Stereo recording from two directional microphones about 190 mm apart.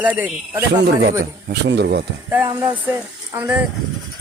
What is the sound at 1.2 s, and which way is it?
Speech, 65° right (ahead or behind).